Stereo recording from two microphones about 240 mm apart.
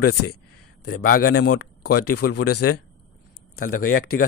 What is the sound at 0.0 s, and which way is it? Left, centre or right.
Speech, left.